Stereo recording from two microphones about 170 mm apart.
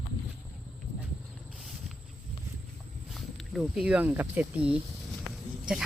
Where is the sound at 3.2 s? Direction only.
Centre (ahead or behind).